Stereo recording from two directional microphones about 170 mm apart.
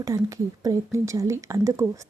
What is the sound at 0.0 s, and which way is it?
A woman's voice, 20° right (ahead or behind).